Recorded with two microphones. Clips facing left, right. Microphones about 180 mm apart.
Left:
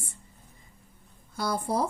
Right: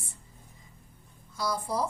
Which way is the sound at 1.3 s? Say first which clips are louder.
Left 3 dB; 55° left (ahead or behind).